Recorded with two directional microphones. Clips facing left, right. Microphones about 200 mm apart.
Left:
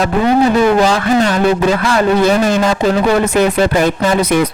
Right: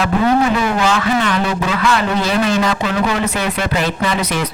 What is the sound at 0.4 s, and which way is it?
A man's voice, 35° left (ahead or behind).